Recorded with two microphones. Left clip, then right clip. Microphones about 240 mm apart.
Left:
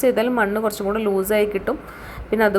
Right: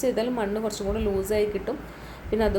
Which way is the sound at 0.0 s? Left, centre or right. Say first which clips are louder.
Left 7 dB; centre.